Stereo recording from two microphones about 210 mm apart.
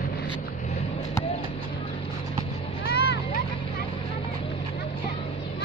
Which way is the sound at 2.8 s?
50° left (ahead or behind).